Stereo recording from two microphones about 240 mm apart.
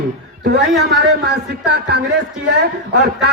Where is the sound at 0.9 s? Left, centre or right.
Right.